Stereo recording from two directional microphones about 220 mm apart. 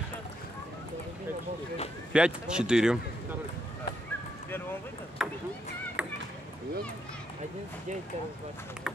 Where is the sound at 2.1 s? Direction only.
5° right (ahead or behind).